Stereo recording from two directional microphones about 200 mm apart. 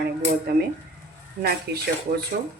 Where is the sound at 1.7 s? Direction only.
55° right (ahead or behind).